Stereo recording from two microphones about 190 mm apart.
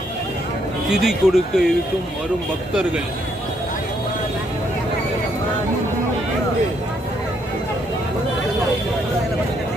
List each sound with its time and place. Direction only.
1.0 s speech: centre (ahead or behind)